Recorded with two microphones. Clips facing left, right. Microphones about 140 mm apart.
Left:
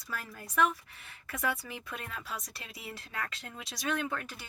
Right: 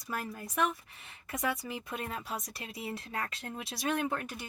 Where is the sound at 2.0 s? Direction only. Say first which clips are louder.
Right 4 dB; 35° right (ahead or behind).